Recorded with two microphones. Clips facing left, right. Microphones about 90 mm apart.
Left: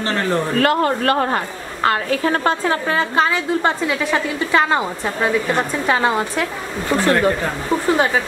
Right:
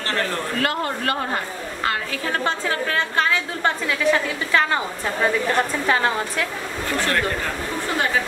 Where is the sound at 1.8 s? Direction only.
45° left (ahead or behind).